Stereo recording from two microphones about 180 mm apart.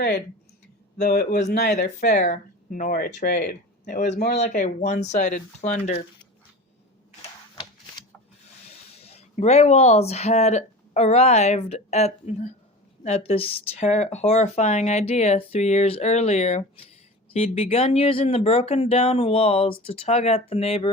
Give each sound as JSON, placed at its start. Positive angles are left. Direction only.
{"t": 0.9, "sound": "speech", "side_deg": 60}
{"t": 1.5, "sound": "speech", "side_deg": 65}
{"t": 2.0, "sound": "speech", "side_deg": 45}
{"t": 7.2, "sound": "a sound", "side_deg": 30}
{"t": 8.7, "sound": "speech", "side_deg": 35}